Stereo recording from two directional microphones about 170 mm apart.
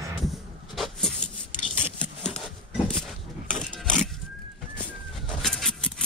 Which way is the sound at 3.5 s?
5° left (ahead or behind).